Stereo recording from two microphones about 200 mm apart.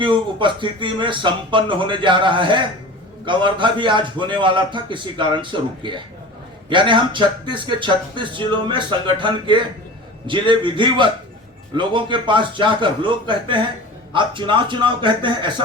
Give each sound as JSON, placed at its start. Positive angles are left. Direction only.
{"t": 0.0, "sound": "speech", "side_deg": -25}